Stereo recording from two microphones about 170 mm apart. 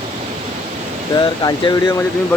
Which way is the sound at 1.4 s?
25° left (ahead or behind).